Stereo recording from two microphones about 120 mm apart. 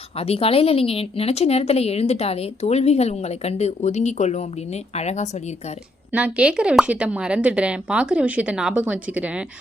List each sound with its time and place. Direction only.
0.2 s a woman's voice: 55° left (ahead or behind)
6.1 s a woman's voice: 10° right (ahead or behind)